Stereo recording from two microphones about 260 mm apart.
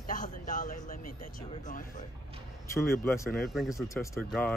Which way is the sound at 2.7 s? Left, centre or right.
Centre.